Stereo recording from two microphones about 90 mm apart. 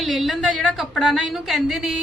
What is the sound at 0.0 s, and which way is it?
A woman's voice, centre (ahead or behind).